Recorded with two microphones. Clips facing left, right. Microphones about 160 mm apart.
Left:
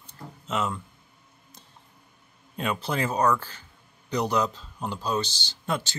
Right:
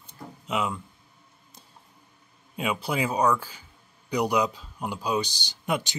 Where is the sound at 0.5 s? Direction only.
10° right (ahead or behind).